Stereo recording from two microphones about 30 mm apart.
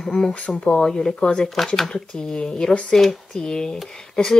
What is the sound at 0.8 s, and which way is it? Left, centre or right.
Speech, centre.